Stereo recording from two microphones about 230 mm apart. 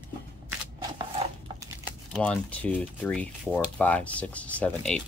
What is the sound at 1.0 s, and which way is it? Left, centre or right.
Dishes, centre.